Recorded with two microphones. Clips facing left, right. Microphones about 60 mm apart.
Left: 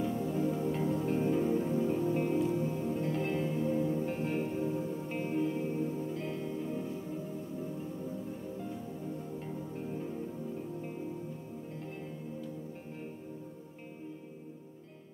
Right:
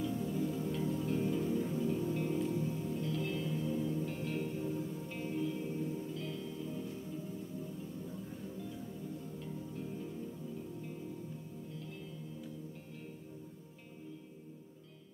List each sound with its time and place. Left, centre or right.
0.0 s music: left
8.5 s music: left